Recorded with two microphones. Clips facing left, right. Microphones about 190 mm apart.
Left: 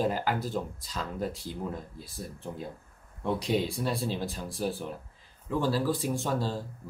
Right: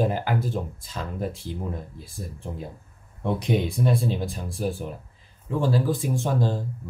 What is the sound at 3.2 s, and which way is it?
Speech, 55° right (ahead or behind).